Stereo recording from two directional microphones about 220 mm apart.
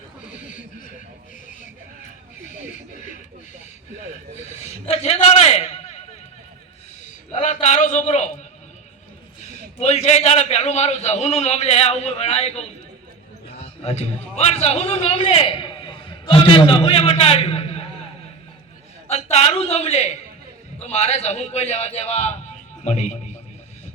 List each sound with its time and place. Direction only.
2.6 s a sound: 35° left (ahead or behind)
4.6 s a man's voice: 30° left (ahead or behind)
7.3 s a sound: 35° left (ahead or behind)
9.4 s a man's voice: 30° left (ahead or behind)
13.8 s a man's voice: 30° left (ahead or behind)
19.1 s a man's voice: 30° left (ahead or behind)